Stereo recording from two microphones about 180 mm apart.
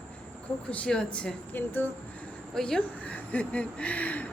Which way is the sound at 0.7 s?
5° left (ahead or behind).